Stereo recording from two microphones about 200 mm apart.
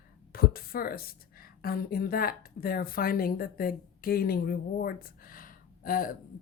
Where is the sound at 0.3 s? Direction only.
50° left (ahead or behind).